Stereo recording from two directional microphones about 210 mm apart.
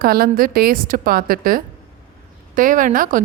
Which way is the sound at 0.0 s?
45° right (ahead or behind).